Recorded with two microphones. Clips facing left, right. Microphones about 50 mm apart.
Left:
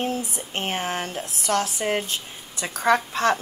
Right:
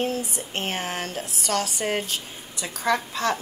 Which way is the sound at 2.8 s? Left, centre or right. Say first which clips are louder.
Left 4 dB; left.